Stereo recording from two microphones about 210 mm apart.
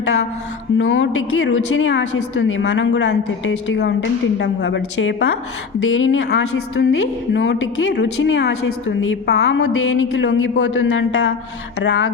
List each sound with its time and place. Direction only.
0.8 s a woman's voice: 60° left (ahead or behind)